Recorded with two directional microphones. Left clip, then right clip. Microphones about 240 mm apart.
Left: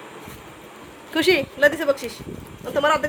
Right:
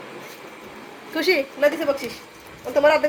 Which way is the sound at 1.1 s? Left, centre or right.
Left.